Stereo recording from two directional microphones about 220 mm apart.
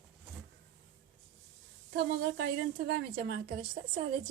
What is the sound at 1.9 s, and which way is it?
A woman's voice, 50° right (ahead or behind).